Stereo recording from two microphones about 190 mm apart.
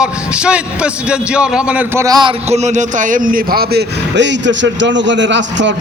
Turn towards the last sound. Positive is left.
turn(degrees=-70)  # may be behind; listen again after turning